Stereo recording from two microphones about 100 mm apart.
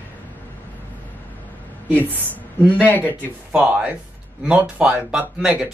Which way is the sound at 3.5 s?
10° right (ahead or behind).